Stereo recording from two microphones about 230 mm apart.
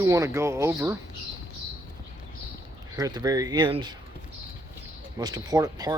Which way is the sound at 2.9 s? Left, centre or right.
Centre.